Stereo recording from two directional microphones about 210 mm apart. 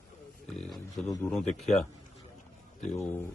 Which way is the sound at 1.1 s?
5° left (ahead or behind).